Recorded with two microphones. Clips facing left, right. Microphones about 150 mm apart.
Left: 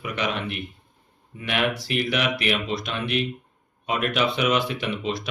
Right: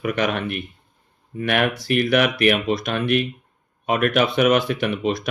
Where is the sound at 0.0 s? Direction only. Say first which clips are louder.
Right 5 dB; 50° right (ahead or behind).